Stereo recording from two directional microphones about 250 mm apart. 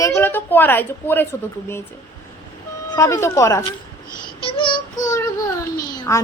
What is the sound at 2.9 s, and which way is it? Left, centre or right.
Speech, centre.